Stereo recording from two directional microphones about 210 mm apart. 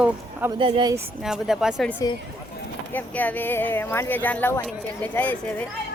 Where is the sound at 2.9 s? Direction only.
10° left (ahead or behind).